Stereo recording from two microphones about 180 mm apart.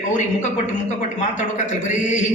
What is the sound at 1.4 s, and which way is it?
Speech, 40° left (ahead or behind).